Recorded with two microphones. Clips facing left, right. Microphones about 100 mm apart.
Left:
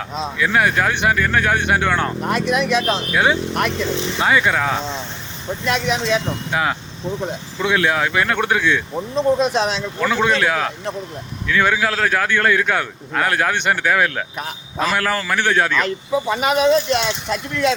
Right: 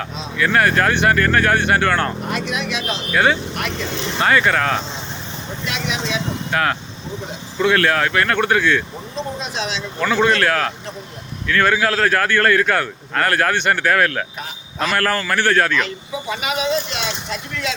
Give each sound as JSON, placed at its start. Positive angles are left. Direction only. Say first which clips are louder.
{"t": 0.3, "sound": "a man's voice", "louder": "right 2 dB", "side_deg": 5}
{"t": 2.2, "sound": "speech", "louder": "left 5 dB", "side_deg": 45}
{"t": 3.1, "sound": "a man's voice", "louder": "right 5 dB", "side_deg": 10}
{"t": 5.6, "sound": "speech", "louder": "left 5 dB", "side_deg": 45}
{"t": 6.5, "sound": "a man's voice", "louder": "right 1 dB", "side_deg": 10}
{"t": 9.4, "sound": "speech", "louder": "left 7 dB", "side_deg": 50}
{"t": 10.0, "sound": "a man's voice", "louder": "right 1 dB", "side_deg": 5}
{"t": 16.3, "sound": "speech", "louder": "left 5 dB", "side_deg": 40}